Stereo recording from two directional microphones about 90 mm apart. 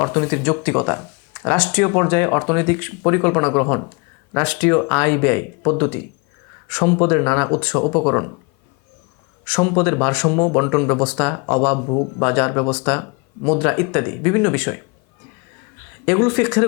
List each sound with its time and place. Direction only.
0.0 s speech: 20° left (ahead or behind)
9.4 s speech: 20° left (ahead or behind)
16.0 s speech: 20° left (ahead or behind)